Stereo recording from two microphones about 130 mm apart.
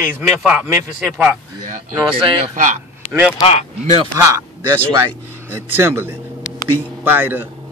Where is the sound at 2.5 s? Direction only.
80° right.